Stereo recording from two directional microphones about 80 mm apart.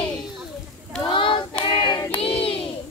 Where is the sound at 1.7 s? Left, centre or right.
Left.